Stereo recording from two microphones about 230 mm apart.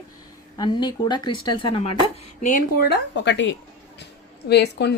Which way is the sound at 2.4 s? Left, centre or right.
Left.